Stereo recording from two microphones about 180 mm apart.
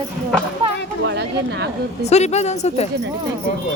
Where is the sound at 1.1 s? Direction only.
70° right (ahead or behind).